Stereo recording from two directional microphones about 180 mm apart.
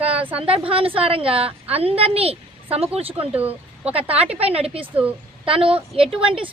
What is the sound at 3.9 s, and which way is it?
A woman's voice, 35° right (ahead or behind).